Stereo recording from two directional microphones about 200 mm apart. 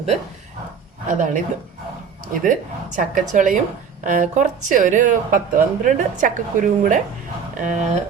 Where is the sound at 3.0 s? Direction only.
40° right (ahead or behind).